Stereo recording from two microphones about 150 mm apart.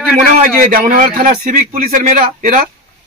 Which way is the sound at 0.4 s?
65° right (ahead or behind).